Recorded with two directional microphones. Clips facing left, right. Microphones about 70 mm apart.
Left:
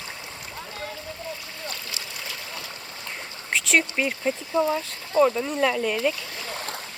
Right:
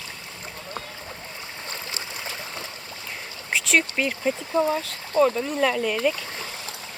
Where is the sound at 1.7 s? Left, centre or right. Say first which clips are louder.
Right 2 dB; right.